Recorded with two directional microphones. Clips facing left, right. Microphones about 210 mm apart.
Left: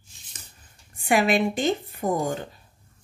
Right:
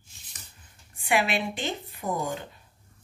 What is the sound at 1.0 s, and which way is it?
Speech, 45° left (ahead or behind).